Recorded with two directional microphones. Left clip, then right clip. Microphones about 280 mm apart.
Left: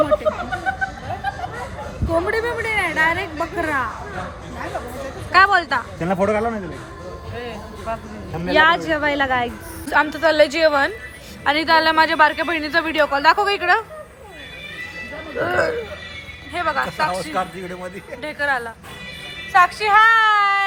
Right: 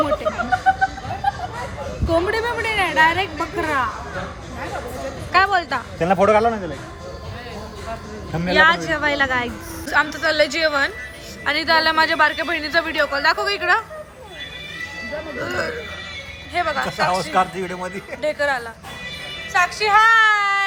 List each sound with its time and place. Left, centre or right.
0.7 s music: right
2.3 s a woman's voice: centre
5.3 s speech: centre
8.5 s a woman's voice: centre
15.4 s a woman's voice: centre
17.3 s a man's voice: right
18.2 s a woman's voice: centre